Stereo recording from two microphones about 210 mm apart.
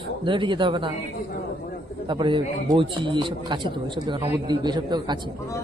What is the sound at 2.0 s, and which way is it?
A man's voice, 25° right (ahead or behind).